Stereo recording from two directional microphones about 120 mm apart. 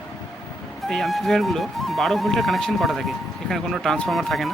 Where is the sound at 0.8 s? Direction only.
Centre (ahead or behind).